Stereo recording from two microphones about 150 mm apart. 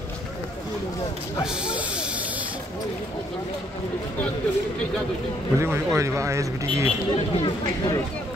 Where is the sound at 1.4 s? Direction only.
5° right (ahead or behind).